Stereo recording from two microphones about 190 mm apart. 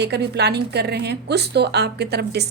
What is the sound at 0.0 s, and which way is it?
A woman's voice, 60° right (ahead or behind).